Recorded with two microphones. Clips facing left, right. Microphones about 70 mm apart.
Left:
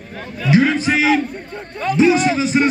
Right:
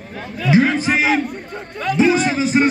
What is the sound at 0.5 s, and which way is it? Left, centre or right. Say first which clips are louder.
A man's voice: left 1 dB; right.